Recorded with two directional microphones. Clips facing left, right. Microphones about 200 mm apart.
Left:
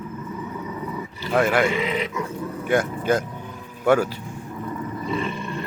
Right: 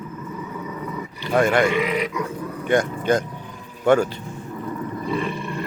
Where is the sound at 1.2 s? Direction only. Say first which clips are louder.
Right 2 dB; 5° left (ahead or behind).